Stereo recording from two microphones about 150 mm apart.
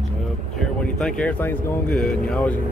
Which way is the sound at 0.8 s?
5° left (ahead or behind).